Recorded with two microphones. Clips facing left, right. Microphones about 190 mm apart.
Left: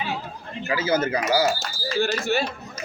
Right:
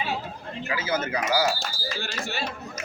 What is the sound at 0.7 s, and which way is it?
Speech, 30° left (ahead or behind).